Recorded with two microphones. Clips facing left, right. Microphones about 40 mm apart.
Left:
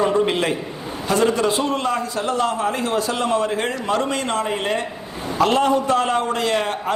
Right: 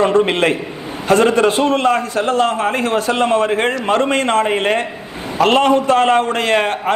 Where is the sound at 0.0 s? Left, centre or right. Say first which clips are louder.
Right 5 dB; right.